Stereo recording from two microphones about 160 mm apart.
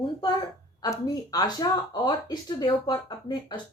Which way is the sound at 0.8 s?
20° left (ahead or behind).